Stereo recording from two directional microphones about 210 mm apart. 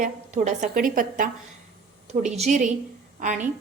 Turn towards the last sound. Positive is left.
turn(degrees=-35)  # may be behind; listen again after turning